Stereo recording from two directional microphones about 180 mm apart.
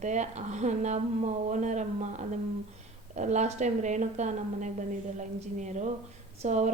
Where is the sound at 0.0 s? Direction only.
40° right (ahead or behind).